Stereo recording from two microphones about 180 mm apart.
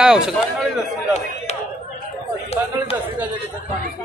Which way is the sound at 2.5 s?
35° left (ahead or behind).